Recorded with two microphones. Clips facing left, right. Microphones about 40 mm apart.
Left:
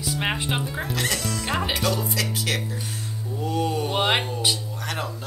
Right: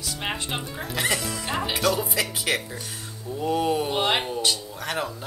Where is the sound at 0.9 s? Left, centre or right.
Centre.